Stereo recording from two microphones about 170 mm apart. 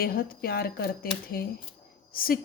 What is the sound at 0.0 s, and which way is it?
A woman's voice, 60° left (ahead or behind).